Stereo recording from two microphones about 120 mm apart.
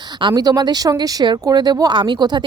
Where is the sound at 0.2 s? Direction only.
35° right (ahead or behind).